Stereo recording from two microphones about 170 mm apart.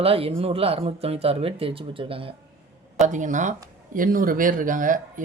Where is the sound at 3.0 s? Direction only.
45° right (ahead or behind).